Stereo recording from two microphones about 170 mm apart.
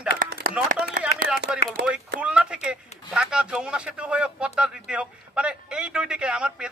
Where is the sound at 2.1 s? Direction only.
5° right (ahead or behind).